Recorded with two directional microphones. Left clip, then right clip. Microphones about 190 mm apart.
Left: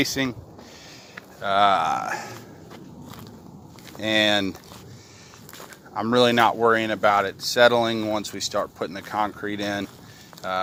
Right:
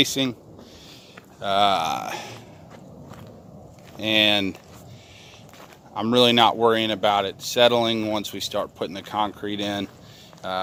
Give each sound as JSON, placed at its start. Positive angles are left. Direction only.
{"t": 0.0, "sound": "speech", "side_deg": -15}
{"t": 1.4, "sound": "speech", "side_deg": -15}
{"t": 4.1, "sound": "speech", "side_deg": -5}
{"t": 5.9, "sound": "speech", "side_deg": -20}